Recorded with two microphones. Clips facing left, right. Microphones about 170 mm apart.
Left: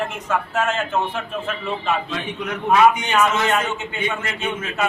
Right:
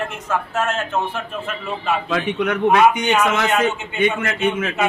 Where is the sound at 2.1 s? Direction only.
75° right (ahead or behind).